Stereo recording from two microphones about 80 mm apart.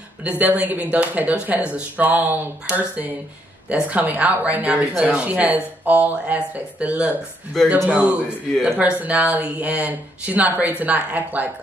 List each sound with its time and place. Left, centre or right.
0.2 s speech: centre
7.5 s speech: centre
7.9 s speech: centre